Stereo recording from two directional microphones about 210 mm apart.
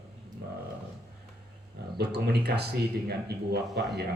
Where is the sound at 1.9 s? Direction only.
50° right (ahead or behind).